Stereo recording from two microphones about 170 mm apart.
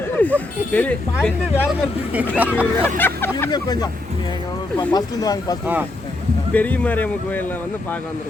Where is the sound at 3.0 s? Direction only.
10° left (ahead or behind).